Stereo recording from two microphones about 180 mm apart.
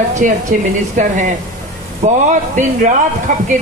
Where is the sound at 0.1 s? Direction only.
45° right (ahead or behind).